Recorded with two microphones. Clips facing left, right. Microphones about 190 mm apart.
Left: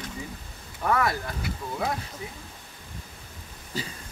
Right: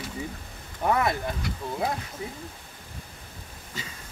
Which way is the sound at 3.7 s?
35° left (ahead or behind).